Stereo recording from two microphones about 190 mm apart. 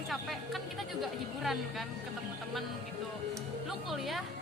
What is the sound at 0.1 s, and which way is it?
Music, centre (ahead or behind).